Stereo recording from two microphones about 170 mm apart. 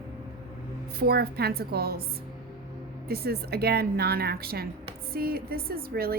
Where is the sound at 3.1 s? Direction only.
65° right (ahead or behind).